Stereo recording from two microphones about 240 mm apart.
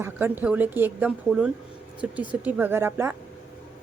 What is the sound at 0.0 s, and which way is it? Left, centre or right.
Speech, centre.